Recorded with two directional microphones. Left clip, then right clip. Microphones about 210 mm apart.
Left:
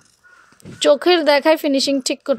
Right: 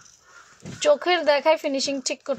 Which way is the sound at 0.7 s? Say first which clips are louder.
Left 6 dB; 35° left (ahead or behind).